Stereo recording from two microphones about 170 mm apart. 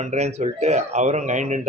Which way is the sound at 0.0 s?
40° right (ahead or behind).